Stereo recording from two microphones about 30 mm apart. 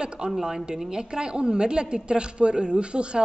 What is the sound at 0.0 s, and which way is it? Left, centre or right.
A woman's voice, right.